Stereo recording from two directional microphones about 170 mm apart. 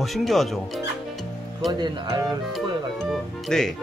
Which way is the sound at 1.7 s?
25° right (ahead or behind).